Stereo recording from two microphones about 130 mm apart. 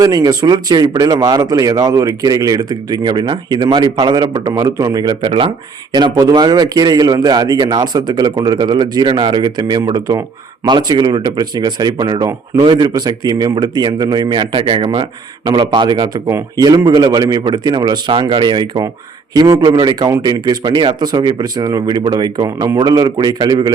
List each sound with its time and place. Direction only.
0.0 s speech: 30° right (ahead or behind)